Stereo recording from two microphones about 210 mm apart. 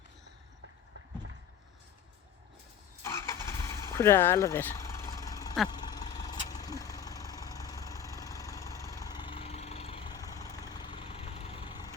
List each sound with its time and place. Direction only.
3.0 s vehicle: 10° left (ahead or behind)